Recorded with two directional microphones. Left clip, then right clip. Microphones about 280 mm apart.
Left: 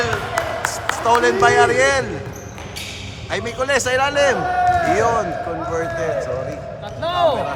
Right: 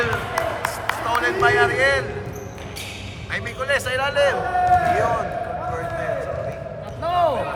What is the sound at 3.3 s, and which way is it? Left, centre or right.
A man's voice, centre.